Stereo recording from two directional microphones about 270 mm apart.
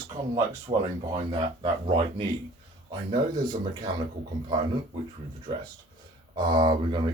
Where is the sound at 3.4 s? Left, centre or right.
Centre.